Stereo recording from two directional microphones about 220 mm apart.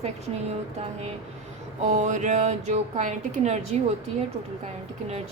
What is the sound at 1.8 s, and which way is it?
Speech, 35° right (ahead or behind).